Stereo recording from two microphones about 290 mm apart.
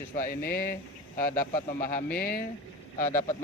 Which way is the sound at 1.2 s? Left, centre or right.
Centre.